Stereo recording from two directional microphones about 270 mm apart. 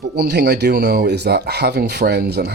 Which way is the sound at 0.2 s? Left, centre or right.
Right.